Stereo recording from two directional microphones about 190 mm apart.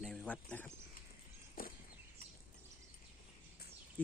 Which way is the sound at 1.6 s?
50° left (ahead or behind).